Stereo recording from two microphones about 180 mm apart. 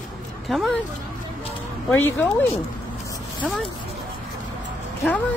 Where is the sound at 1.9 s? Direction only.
10° left (ahead or behind).